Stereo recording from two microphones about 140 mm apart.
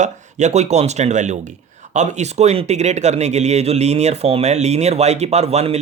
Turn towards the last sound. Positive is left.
turn(degrees=-50)  # may be behind; listen again after turning